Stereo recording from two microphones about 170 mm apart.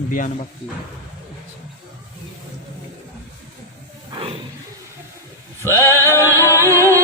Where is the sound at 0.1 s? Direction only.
50° left (ahead or behind).